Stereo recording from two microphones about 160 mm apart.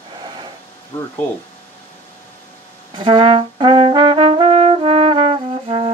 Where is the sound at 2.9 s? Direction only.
30° right (ahead or behind).